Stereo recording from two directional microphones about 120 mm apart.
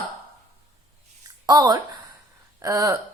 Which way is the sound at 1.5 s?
30° right (ahead or behind).